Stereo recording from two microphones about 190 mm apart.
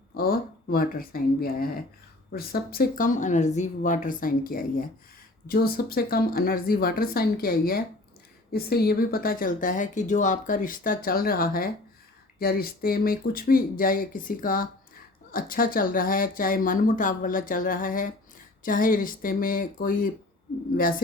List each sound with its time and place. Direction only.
0.1 s speech: 50° left (ahead or behind)